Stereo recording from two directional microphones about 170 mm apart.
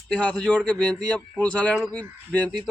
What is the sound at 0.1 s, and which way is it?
Speech, 5° left (ahead or behind).